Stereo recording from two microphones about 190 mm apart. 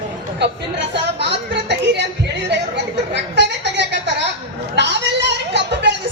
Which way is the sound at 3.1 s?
65° right (ahead or behind).